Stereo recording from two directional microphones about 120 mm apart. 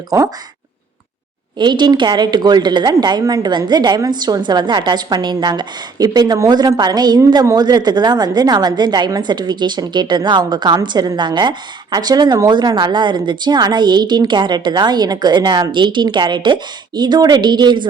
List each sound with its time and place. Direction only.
1.5 s a woman's voice: 40° right (ahead or behind)